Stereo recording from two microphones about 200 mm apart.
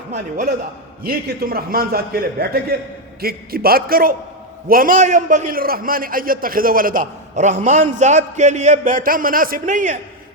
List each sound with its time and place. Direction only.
1.0 s a man's voice: 50° right (ahead or behind)